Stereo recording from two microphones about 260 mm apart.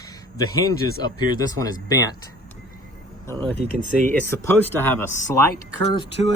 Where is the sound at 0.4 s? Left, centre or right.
Centre.